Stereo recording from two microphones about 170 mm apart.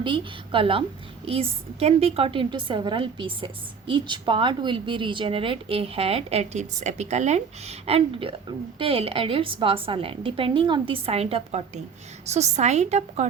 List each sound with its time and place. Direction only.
0.0 s a woman's voice: 30° right (ahead or behind)